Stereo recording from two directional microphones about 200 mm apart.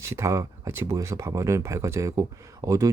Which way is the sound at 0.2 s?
15° right (ahead or behind).